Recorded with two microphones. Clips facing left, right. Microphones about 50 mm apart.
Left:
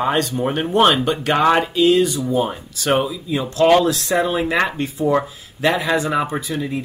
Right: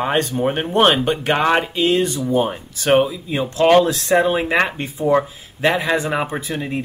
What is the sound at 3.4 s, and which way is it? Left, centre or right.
Speech, centre.